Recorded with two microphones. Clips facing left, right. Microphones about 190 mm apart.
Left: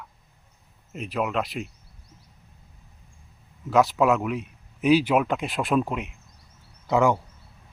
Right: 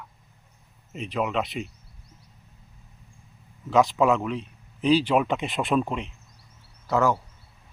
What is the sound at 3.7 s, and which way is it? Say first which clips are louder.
A man's voice: even; centre (ahead or behind).